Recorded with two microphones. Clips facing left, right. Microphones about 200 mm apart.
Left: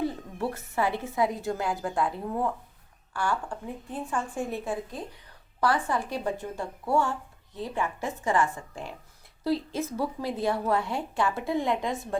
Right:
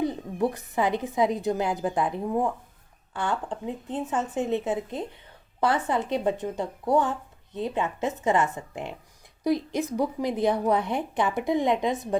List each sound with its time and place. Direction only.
0.0 s a woman's voice: 20° right (ahead or behind)